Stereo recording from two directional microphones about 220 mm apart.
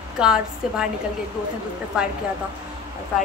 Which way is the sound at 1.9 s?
5° right (ahead or behind).